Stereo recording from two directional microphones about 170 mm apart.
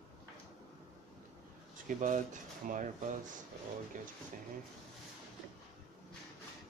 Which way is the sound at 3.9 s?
50° right (ahead or behind).